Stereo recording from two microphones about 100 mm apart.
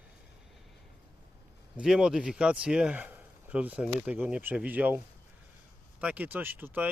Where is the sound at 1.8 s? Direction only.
5° right (ahead or behind).